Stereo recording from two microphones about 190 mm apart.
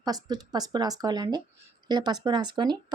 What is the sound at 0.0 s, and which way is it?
Speech, 20° right (ahead or behind).